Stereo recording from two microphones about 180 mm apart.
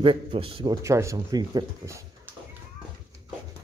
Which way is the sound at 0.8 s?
15° right (ahead or behind).